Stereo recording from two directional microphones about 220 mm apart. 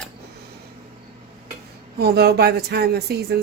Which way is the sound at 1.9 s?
45° right (ahead or behind).